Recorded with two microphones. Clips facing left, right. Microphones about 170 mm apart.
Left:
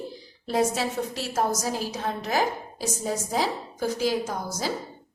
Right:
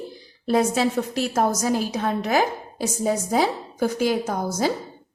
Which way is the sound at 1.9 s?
60° right (ahead or behind).